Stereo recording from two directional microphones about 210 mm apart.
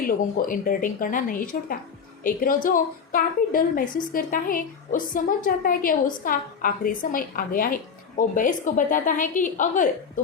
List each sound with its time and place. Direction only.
0.3 s a woman's voice: 40° left (ahead or behind)